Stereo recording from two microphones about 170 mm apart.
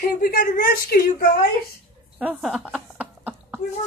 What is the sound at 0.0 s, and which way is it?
A woman's voice, 60° left (ahead or behind).